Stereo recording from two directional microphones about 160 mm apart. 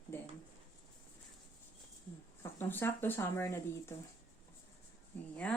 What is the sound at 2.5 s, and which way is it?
Speech, 15° left (ahead or behind).